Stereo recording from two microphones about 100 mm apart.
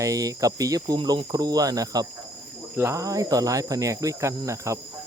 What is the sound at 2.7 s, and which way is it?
Cricket, 25° right (ahead or behind).